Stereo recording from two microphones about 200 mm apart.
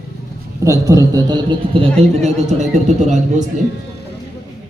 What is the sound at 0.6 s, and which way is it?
A man's voice, 15° right (ahead or behind).